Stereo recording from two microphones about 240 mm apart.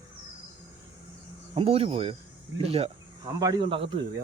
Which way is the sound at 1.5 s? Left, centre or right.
Right.